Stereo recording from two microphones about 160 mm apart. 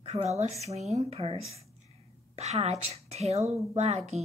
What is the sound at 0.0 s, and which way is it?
A woman's voice, 45° right (ahead or behind).